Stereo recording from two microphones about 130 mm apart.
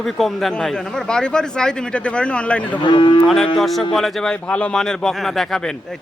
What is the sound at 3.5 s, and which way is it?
A man's voice, centre (ahead or behind).